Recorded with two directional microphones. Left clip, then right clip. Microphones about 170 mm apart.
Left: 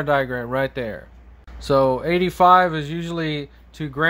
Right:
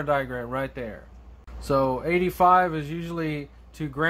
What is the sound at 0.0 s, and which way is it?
Speech, 30° left (ahead or behind).